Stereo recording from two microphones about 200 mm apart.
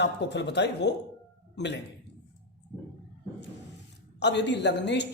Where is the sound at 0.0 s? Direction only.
60° left (ahead or behind).